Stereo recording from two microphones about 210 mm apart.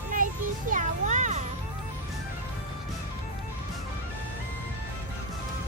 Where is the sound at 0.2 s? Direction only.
40° right (ahead or behind).